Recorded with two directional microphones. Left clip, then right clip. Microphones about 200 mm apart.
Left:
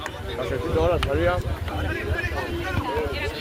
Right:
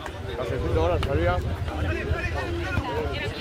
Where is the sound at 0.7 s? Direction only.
45° left (ahead or behind).